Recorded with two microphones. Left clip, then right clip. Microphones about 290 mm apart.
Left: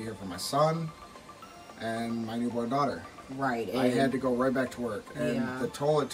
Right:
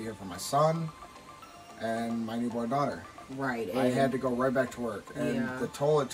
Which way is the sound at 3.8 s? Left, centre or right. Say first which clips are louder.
Right 1 dB; centre.